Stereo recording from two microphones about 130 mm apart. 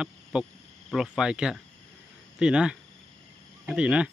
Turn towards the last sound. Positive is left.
turn(degrees=-10)  # may be behind; listen again after turning